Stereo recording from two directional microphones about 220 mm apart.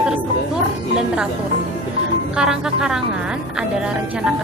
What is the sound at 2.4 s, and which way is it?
Speech, 5° right (ahead or behind).